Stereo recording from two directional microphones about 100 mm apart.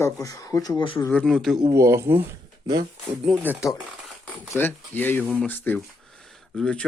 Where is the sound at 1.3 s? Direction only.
Centre (ahead or behind).